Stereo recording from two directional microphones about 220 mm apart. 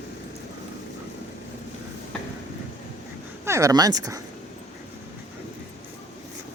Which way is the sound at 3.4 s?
15° right (ahead or behind).